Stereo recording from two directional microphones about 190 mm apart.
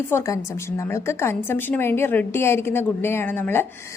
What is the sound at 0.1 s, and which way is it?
A woman's voice, 15° left (ahead or behind).